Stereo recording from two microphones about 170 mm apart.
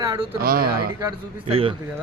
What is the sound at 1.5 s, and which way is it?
Speech, 35° right (ahead or behind).